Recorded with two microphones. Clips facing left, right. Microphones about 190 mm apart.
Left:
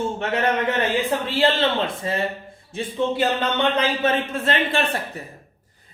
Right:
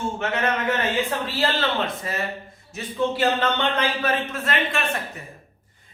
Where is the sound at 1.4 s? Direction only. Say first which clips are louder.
Left 4 dB; 25° left (ahead or behind).